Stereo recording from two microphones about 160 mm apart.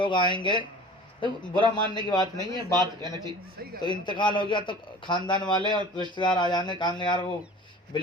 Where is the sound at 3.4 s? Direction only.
70° right (ahead or behind).